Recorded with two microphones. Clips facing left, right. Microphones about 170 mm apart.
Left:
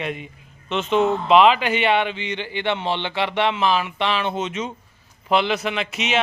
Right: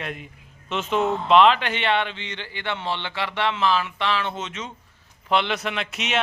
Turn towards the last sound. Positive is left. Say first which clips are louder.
# left 3 dB
turn(degrees=0)  # may be behind; listen again after turning